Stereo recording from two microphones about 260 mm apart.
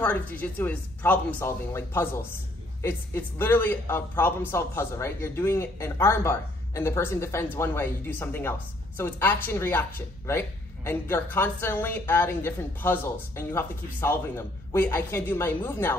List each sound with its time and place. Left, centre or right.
0.0 s speech: centre